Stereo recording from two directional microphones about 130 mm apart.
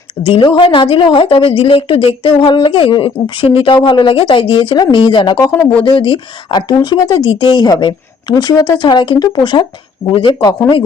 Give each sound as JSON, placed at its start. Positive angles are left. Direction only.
{"t": 0.3, "sound": "a woman's voice", "side_deg": 40}